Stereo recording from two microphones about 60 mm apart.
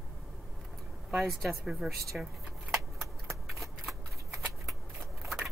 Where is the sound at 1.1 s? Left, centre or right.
Centre.